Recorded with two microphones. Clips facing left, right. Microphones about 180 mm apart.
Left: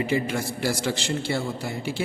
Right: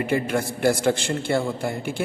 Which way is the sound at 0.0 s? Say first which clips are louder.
Right 2 dB; 55° right (ahead or behind).